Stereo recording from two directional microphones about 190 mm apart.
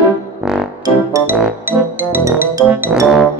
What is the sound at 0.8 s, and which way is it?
Music, 15° right (ahead or behind).